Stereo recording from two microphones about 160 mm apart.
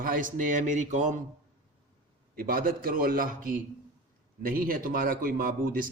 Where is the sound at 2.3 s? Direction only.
65° right (ahead or behind).